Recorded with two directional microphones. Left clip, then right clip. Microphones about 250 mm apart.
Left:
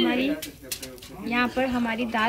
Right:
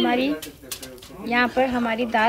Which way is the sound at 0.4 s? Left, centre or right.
Centre.